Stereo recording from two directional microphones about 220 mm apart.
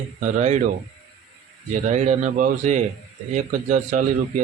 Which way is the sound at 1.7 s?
35° right (ahead or behind).